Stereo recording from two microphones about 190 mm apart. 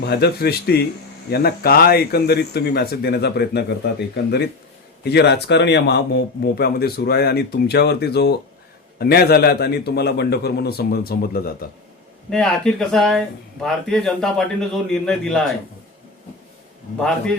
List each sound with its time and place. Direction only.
0.0 s a man's voice: 55° left (ahead or behind)
12.3 s speech: centre (ahead or behind)